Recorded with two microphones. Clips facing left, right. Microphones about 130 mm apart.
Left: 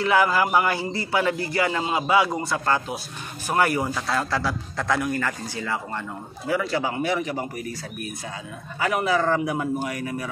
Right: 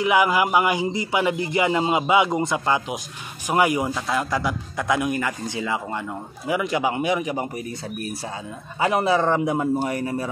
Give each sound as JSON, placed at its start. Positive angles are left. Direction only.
{"t": 0.0, "sound": "a man's voice", "side_deg": -15}
{"t": 8.7, "sound": "a man's voice", "side_deg": -25}